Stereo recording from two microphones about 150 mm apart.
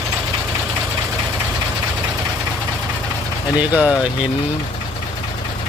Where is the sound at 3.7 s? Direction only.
10° right (ahead or behind).